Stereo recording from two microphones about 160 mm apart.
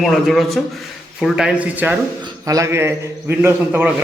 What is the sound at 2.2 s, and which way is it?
A man's voice, 20° right (ahead or behind).